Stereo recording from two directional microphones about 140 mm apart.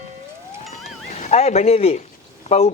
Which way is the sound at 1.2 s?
50° left (ahead or behind).